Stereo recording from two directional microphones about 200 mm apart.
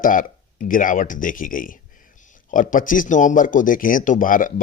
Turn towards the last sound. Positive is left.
turn(degrees=40)  # may be behind; listen again after turning